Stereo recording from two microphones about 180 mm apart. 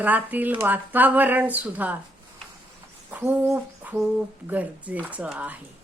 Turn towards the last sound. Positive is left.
turn(degrees=-10)  # may be behind; listen again after turning